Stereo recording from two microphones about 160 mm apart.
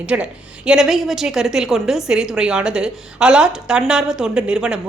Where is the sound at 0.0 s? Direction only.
5° right (ahead or behind).